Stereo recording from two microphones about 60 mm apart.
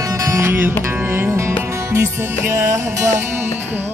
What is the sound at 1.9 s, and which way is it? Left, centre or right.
Music, right.